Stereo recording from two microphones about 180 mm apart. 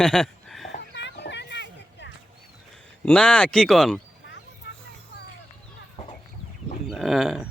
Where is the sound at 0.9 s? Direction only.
75° left (ahead or behind).